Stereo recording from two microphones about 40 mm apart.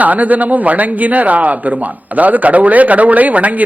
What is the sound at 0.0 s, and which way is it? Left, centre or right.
A man's voice, right.